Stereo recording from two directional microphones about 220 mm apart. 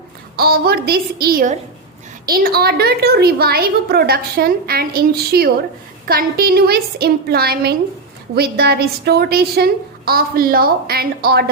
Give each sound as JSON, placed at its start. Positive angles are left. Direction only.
{"t": 0.3, "sound": "a woman's voice", "side_deg": -45}